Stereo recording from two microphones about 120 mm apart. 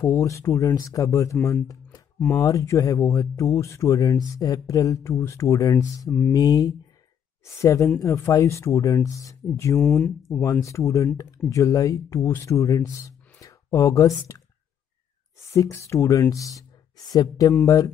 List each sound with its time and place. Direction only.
0.0 s speech: 25° left (ahead or behind)
9.8 s speech: 10° left (ahead or behind)
10.2 s speech: 25° left (ahead or behind)
15.3 s speech: 25° left (ahead or behind)